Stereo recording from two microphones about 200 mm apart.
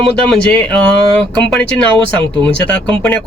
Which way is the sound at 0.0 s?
5° left (ahead or behind).